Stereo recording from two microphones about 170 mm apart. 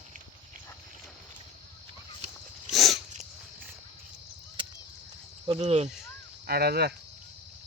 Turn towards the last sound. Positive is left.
turn(degrees=-70)  # may be behind; listen again after turning